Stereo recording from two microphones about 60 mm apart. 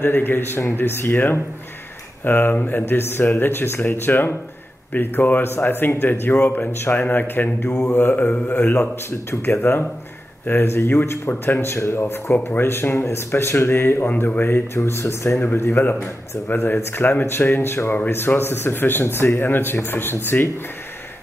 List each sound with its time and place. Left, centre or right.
0.0 s speech: left
9.3 s speech: left
14.0 s speech: left